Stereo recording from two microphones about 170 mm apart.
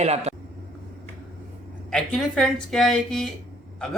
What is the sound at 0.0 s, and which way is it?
Speech, 40° right (ahead or behind).